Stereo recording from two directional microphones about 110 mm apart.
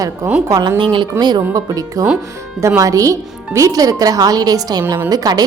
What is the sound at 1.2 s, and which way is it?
Speech, 35° right (ahead or behind).